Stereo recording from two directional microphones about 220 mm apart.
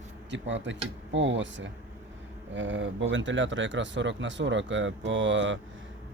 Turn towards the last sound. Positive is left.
turn(degrees=-60)  # may be behind; listen again after turning